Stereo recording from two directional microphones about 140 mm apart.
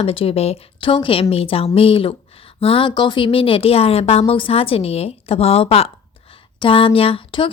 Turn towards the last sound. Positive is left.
turn(degrees=40)  # may be behind; listen again after turning